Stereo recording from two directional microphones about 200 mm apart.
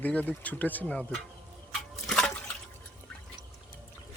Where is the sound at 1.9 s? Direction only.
Centre (ahead or behind).